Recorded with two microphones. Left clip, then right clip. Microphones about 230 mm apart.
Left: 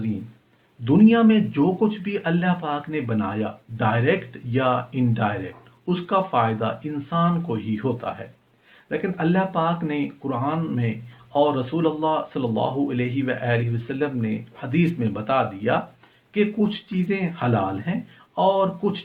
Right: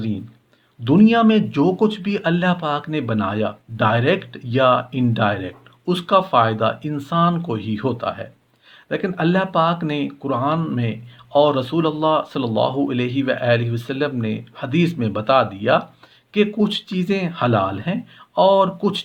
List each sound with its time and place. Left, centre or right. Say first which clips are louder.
0.9 s speech: right 3 dB; right